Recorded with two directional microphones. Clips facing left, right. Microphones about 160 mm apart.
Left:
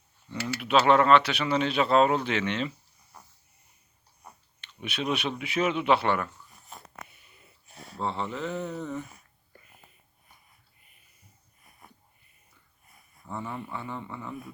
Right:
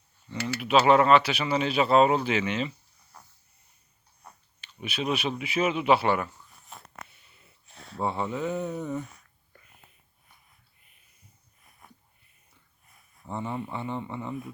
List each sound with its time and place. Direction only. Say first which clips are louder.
0.3 s typing: right 1 dB; 5° left (ahead or behind)
0.6 s speech: right 1 dB; 5° right (ahead or behind)
4.6 s speech: right 1 dB; centre (ahead or behind)
7.7 s a sound: left 1 dB; 10° left (ahead or behind)
7.9 s speech: right 2 dB; 10° right (ahead or behind)
9.0 s a sound: right 2 dB; 10° left (ahead or behind)
13.2 s speech: right 3 dB; 20° right (ahead or behind)